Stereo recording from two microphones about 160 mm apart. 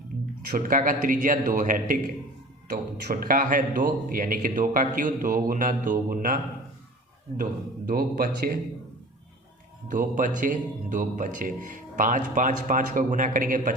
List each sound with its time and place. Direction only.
0.9 s a man's voice: 55° right (ahead or behind)
2.6 s a man's voice: 70° right (ahead or behind)
7.9 s speech: 65° right (ahead or behind)
9.9 s a man's voice: 55° right (ahead or behind)